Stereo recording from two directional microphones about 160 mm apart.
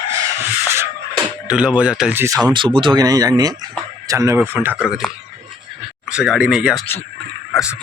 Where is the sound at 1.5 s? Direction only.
5° right (ahead or behind).